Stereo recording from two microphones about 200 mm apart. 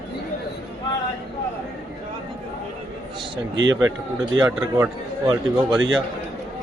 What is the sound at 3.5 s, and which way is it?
Speech, 70° right (ahead or behind).